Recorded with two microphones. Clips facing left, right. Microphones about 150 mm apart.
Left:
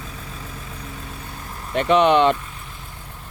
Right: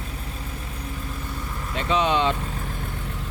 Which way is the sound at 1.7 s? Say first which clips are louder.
Left 7 dB; 65° left (ahead or behind).